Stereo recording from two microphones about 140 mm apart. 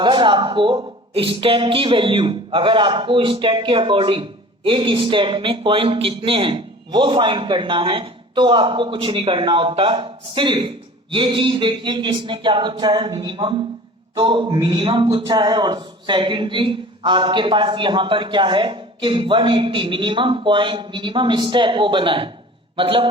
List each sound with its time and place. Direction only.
0.0 s speech: 35° right (ahead or behind)